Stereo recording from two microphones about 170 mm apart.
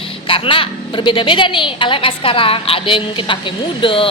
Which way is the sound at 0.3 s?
30° left (ahead or behind).